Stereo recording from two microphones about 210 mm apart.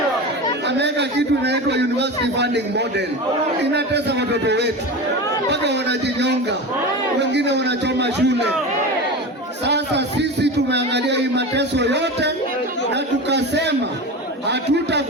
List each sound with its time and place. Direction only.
0.7 s chatter: 55° right (ahead or behind)
1.5 s a man's voice: 55° right (ahead or behind)
9.6 s a man's voice: 55° right (ahead or behind)
14.4 s a sound: 55° right (ahead or behind)